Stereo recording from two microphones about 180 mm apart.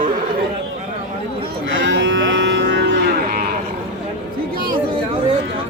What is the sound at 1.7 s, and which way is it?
Livestock, 90° right.